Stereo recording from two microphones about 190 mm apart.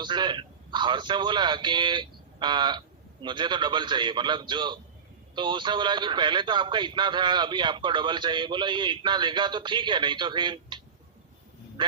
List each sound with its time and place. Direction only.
0.0 s a man's voice: 25° right (ahead or behind)
11.8 s speech: 25° right (ahead or behind)